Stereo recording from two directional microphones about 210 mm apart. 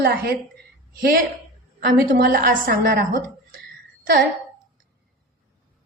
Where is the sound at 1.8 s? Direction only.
45° right (ahead or behind).